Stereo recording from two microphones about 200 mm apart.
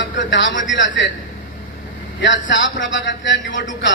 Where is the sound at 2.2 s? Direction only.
65° left (ahead or behind).